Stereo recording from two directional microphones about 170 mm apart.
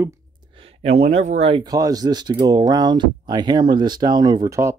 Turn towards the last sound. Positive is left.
turn(degrees=-20)  # may be behind; listen again after turning